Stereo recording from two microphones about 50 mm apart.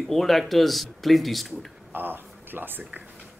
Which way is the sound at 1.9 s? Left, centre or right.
Right.